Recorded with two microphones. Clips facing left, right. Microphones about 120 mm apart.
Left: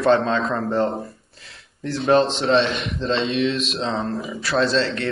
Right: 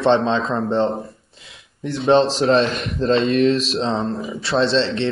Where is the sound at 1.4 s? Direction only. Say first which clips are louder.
Right 2 dB; 15° right (ahead or behind).